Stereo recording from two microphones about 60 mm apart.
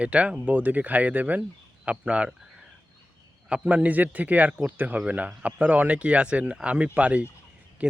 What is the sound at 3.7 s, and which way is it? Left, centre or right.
Speech, right.